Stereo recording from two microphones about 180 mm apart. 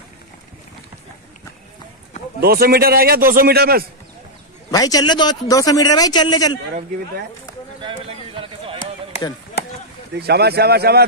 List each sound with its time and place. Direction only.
2.4 s a man's voice: 60° right (ahead or behind)
4.6 s a man's voice: 20° left (ahead or behind)
7.8 s a sound: 30° right (ahead or behind)
10.1 s a man's voice: 65° right (ahead or behind)